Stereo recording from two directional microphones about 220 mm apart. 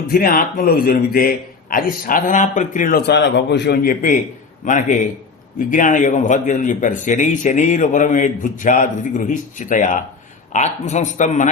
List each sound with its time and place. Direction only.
0.1 s a man's voice: 40° left (ahead or behind)